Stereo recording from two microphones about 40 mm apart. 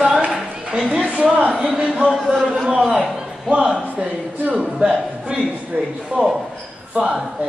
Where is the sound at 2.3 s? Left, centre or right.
Centre.